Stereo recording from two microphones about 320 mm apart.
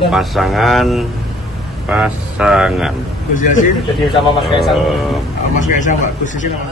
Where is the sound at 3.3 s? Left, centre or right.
Left.